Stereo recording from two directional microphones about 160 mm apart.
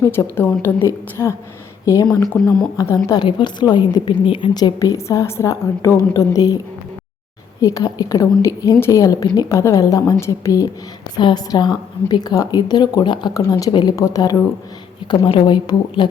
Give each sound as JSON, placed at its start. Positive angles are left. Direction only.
{"t": 0.0, "sound": "a woman's voice", "side_deg": 15}
{"t": 2.3, "sound": "speech", "side_deg": 5}
{"t": 2.7, "sound": "a woman's voice", "side_deg": 20}
{"t": 7.6, "sound": "a woman's voice", "side_deg": 20}